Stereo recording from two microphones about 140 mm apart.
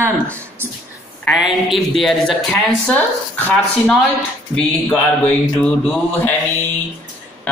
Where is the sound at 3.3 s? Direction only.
10° left (ahead or behind).